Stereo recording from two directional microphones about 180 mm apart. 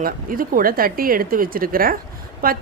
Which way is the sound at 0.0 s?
50° right (ahead or behind).